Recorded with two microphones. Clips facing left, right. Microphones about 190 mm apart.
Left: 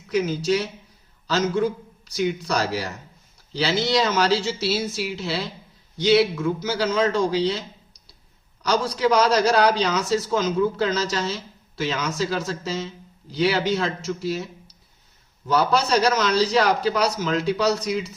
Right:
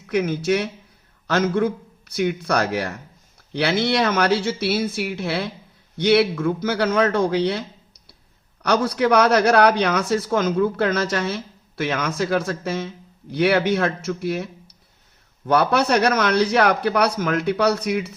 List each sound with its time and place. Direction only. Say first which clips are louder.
0.1 s speech: right 1 dB; 60° right (ahead or behind)
8.6 s speech: right 2 dB; 60° right (ahead or behind)